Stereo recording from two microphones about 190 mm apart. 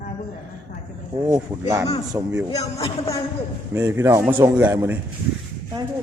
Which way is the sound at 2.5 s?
20° left (ahead or behind).